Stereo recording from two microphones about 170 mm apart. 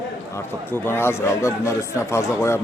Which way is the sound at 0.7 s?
15° left (ahead or behind).